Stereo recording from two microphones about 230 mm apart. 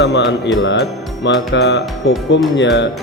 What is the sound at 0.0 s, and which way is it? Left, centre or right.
Speech, left.